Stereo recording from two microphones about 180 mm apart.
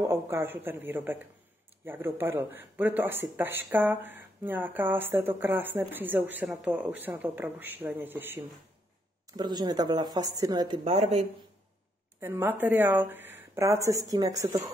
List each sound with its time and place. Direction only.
0.0 s speech: 15° right (ahead or behind)
9.4 s a woman's voice: 25° right (ahead or behind)
10.8 s speech: 35° right (ahead or behind)
12.2 s speech: 10° right (ahead or behind)